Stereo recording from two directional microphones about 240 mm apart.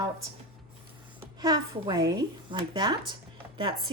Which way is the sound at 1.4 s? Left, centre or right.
Centre.